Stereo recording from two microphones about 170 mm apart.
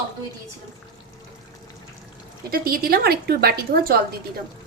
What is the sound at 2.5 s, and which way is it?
Speech, 60° right (ahead or behind).